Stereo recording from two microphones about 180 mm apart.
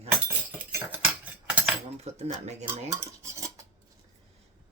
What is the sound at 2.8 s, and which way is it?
Stir, 15° right (ahead or behind).